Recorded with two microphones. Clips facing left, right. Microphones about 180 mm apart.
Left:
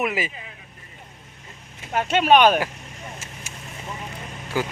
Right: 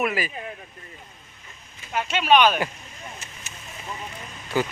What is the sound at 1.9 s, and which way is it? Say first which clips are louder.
Speech: left 3 dB; 50° left (ahead or behind).